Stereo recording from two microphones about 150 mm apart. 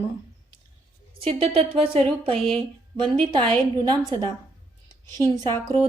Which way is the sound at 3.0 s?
30° right (ahead or behind).